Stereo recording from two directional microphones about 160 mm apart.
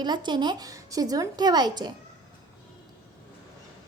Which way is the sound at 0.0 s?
30° right (ahead or behind).